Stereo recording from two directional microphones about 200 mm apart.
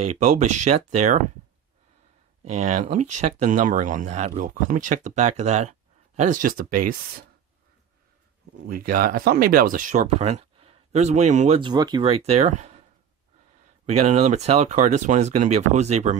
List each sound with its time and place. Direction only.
0.2 s speech: 35° right (ahead or behind)
2.6 s speech: 35° right (ahead or behind)
8.6 s speech: 45° right (ahead or behind)
13.8 s speech: 30° right (ahead or behind)